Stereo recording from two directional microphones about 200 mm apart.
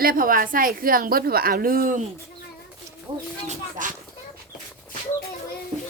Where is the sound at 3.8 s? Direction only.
40° right (ahead or behind).